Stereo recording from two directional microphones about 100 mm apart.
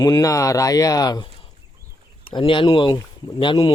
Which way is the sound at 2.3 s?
60° left (ahead or behind).